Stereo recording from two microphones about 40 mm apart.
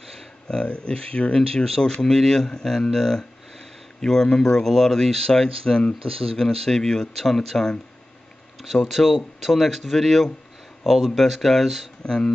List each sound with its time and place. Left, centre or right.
0.5 s speech: left
8.6 s speech: centre
10.8 s speech: centre
11.1 s speech: centre
12.0 s speech: left